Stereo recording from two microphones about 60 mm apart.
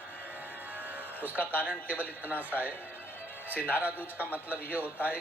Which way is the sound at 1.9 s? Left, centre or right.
Right.